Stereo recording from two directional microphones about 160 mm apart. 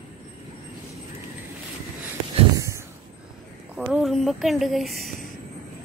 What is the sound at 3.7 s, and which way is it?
Speech, 5° right (ahead or behind).